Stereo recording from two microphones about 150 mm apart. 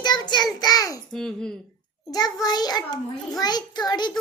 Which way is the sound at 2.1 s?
25° left (ahead or behind).